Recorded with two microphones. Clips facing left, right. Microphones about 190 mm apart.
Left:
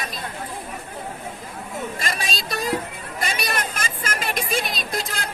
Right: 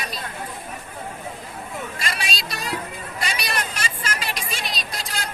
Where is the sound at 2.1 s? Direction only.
50° left (ahead or behind).